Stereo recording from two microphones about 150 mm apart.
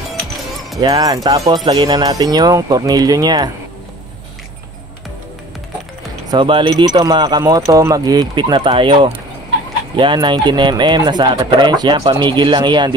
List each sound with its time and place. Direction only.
0.7 s speech: 25° right (ahead or behind)
6.3 s speech: 35° right (ahead or behind)